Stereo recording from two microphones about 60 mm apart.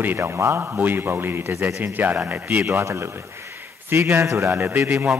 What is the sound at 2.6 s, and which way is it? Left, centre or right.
A man's voice, right.